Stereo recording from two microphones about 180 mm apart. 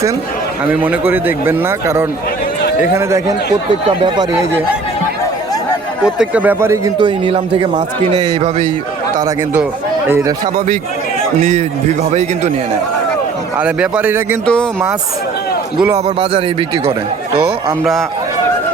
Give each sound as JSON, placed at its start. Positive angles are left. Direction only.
{"t": 0.6, "sound": "a man's voice", "side_deg": -10}
{"t": 2.6, "sound": "a sound", "side_deg": 65}
{"t": 2.9, "sound": "a man's voice", "side_deg": -15}
{"t": 3.8, "sound": "speech", "side_deg": -25}
{"t": 6.1, "sound": "a man's voice", "side_deg": -10}
{"t": 7.3, "sound": "speech", "side_deg": -30}
{"t": 10.1, "sound": "a man's voice", "side_deg": -15}
{"t": 13.6, "sound": "a man's voice", "side_deg": -5}
{"t": 14.4, "sound": "speech", "side_deg": 5}
{"t": 16.0, "sound": "a man's voice", "side_deg": -30}